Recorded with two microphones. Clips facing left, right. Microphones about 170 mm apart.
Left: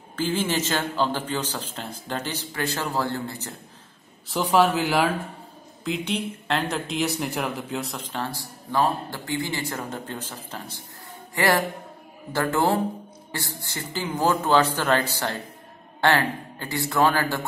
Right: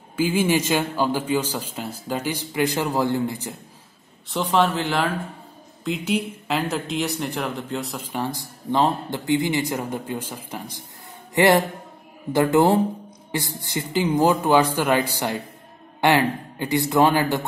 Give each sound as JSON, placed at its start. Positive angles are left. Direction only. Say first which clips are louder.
{"t": 0.1, "sound": "speech", "louder": "right 5 dB", "side_deg": -10}
{"t": 4.3, "sound": "speech", "louder": "left 1 dB", "side_deg": 5}
{"t": 5.9, "sound": "speech", "louder": "right 3 dB", "side_deg": -5}